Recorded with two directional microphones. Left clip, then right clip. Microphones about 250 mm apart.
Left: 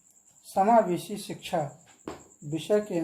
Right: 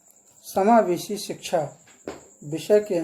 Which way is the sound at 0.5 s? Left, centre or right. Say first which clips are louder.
Right 3 dB; right.